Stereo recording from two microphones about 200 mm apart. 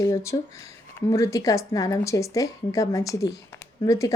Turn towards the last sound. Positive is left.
turn(degrees=15)  # may be behind; listen again after turning